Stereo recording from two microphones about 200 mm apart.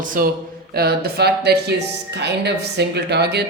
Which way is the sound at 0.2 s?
45° right (ahead or behind).